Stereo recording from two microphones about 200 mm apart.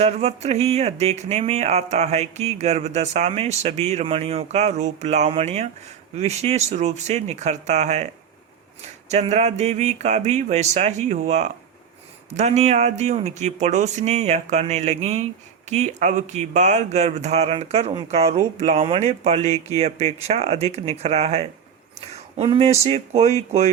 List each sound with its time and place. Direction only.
0.0 s speech: 30° right (ahead or behind)